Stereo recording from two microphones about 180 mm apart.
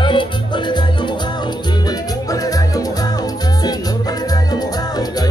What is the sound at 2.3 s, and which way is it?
Music, 20° left (ahead or behind).